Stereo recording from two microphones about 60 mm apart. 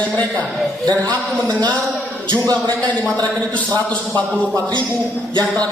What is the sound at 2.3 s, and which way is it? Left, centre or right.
Speech, right.